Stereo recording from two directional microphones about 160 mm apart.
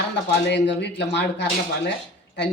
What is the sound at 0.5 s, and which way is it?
Speech, 90° left.